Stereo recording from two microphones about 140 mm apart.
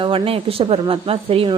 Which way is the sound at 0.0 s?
40° right (ahead or behind).